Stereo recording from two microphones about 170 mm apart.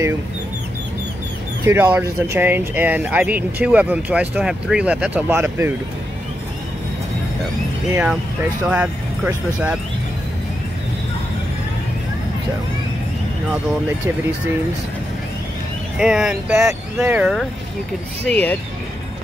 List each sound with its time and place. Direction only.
1.6 s speech: 15° right (ahead or behind)
7.9 s speech: 5° right (ahead or behind)
16.0 s speech: 5° right (ahead or behind)
18.2 s speech: 10° left (ahead or behind)